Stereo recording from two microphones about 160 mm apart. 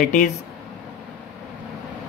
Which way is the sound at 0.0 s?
50° left (ahead or behind).